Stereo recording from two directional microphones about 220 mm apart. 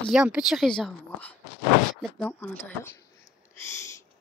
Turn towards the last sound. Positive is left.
turn(degrees=15)  # may be behind; listen again after turning